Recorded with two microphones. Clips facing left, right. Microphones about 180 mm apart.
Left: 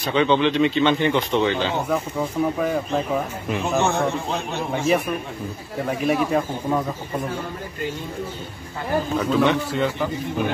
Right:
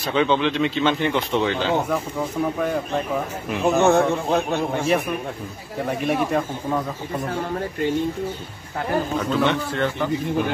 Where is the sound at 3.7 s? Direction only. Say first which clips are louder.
Right 4 dB; 55° right (ahead or behind).